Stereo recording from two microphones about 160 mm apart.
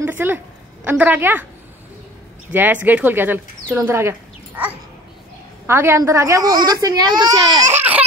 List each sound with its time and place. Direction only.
0.0 s a sound: 10° right (ahead or behind)
0.8 s a woman's voice: 10° right (ahead or behind)
2.5 s a child's voice: 10° right (ahead or behind)